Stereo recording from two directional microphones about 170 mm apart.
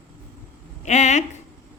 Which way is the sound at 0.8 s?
45° left (ahead or behind).